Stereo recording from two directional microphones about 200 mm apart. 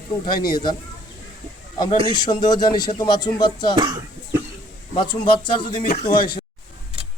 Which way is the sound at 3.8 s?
20° right (ahead or behind).